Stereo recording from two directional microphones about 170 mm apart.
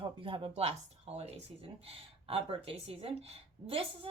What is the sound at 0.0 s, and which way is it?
A woman's voice, 30° right (ahead or behind).